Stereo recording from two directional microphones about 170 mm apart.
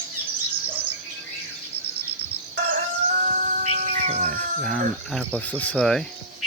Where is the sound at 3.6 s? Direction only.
40° right (ahead or behind).